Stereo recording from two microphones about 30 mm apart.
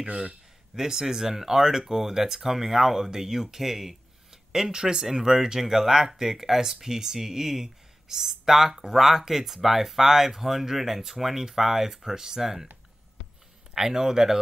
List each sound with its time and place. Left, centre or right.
0.7 s speech: centre
4.6 s speech: centre
13.7 s speech: centre